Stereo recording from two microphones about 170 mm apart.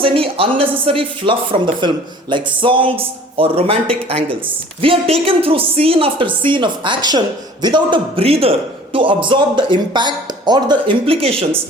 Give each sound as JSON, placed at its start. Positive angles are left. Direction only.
{"t": 0.0, "sound": "a man's voice", "side_deg": -35}